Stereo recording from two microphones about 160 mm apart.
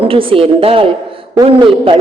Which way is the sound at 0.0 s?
35° right (ahead or behind).